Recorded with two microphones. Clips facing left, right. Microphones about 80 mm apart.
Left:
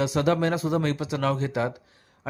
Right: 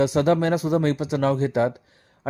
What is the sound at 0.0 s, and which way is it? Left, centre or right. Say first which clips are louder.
A man's voice: right 4 dB; right.